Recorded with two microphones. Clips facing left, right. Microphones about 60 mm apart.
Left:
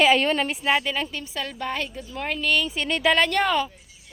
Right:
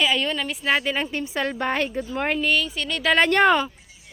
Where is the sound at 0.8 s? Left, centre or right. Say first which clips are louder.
Right 2 dB; centre.